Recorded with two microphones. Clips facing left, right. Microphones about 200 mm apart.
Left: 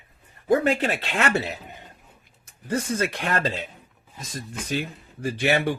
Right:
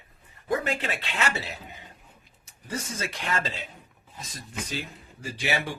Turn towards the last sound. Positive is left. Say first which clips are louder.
# left 7 dB
turn(degrees=60)  # may be behind; listen again after turning